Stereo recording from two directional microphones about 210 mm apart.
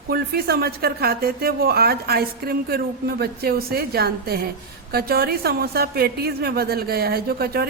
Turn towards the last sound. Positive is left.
turn(degrees=-45)  # may be behind; listen again after turning